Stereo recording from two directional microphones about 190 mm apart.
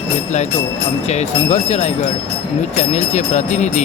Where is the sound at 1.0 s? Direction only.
35° left (ahead or behind).